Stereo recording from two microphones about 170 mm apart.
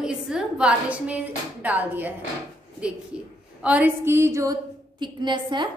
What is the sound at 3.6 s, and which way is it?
A woman's voice, 10° right (ahead or behind).